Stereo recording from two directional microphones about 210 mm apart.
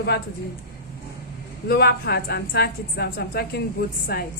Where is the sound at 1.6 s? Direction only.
50° left (ahead or behind).